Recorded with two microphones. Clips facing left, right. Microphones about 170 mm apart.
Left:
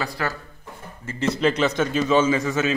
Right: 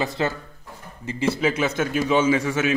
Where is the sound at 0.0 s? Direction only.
20° right (ahead or behind).